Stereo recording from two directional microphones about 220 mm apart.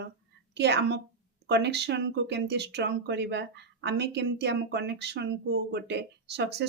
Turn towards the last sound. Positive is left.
turn(degrees=-50)  # may be behind; listen again after turning